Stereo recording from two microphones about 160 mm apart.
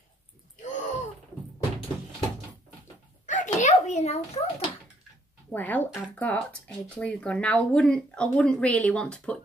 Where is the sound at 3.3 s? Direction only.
50° left (ahead or behind).